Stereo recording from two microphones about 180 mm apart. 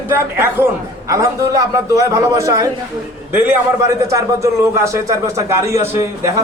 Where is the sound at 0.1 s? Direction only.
10° right (ahead or behind).